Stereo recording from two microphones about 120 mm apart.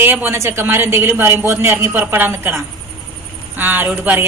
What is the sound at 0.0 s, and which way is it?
A man's voice, 15° right (ahead or behind).